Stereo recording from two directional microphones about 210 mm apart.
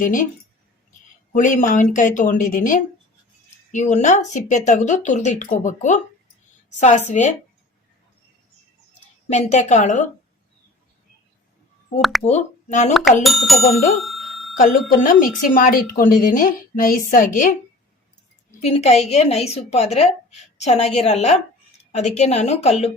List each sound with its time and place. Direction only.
0.0 s speech: 40° left (ahead or behind)
1.3 s speech: 40° left (ahead or behind)
9.3 s speech: 35° left (ahead or behind)
12.2 s speech: 30° left (ahead or behind)
13.2 s speech: centre (ahead or behind)
14.0 s bicycle bell: centre (ahead or behind)
14.6 s speech: 40° left (ahead or behind)
18.6 s speech: 30° left (ahead or behind)